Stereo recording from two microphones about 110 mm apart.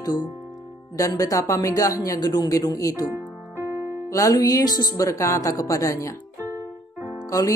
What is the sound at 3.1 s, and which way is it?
Music, 20° right (ahead or behind).